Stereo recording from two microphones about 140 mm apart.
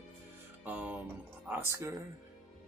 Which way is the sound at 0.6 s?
10° right (ahead or behind).